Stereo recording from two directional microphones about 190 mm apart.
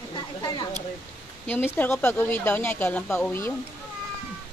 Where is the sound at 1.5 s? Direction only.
10° left (ahead or behind).